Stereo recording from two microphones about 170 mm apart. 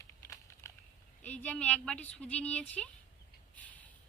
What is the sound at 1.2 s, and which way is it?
A woman's voice, 10° left (ahead or behind).